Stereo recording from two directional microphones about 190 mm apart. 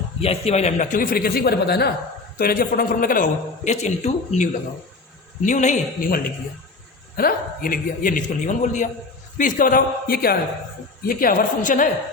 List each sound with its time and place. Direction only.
0.2 s a man's voice: 35° left (ahead or behind)
5.5 s a man's voice: 40° left (ahead or behind)